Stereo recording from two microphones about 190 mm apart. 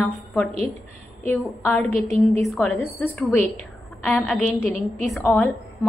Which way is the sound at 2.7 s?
15° left (ahead or behind).